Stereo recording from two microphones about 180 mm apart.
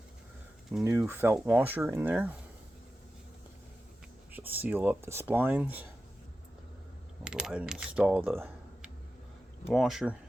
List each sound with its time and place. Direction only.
0.9 s speech: 15° right (ahead or behind)
4.3 s speech: 10° right (ahead or behind)
7.3 s speech: 5° right (ahead or behind)